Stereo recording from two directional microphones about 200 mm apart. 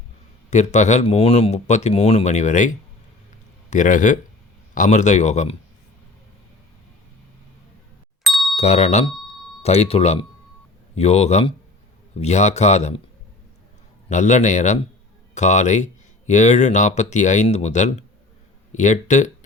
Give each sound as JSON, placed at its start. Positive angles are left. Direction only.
{"t": 0.5, "sound": "speech", "side_deg": 35}
{"t": 8.2, "sound": "ding", "side_deg": 0}
{"t": 8.5, "sound": "speech", "side_deg": 35}
{"t": 14.1, "sound": "speech", "side_deg": 35}